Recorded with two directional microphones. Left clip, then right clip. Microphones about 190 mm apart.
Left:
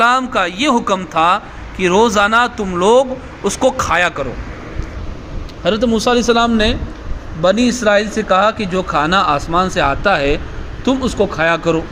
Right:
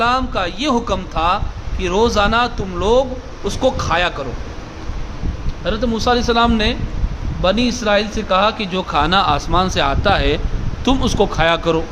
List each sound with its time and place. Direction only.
0.0 s a man's voice: 15° left (ahead or behind)
5.6 s a man's voice: 25° left (ahead or behind); by 11.8 s centre (ahead or behind)